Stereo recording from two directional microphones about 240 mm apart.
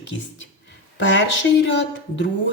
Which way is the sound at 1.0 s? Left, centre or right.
Left.